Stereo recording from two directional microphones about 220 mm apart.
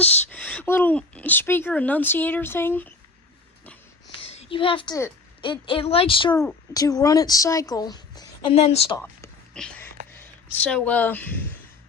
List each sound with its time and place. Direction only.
0.0 s speech: 5° left (ahead or behind)
4.1 s a woman's voice: 25° left (ahead or behind)
9.6 s a sound: 5° left (ahead or behind)
10.2 s speech: 5° left (ahead or behind)